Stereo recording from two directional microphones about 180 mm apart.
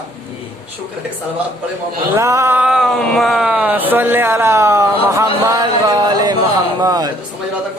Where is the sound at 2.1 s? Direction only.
15° right (ahead or behind).